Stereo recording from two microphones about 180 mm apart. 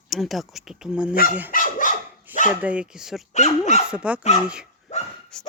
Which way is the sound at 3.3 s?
40° left (ahead or behind).